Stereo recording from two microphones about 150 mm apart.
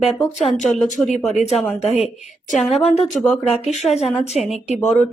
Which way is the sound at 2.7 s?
45° left (ahead or behind).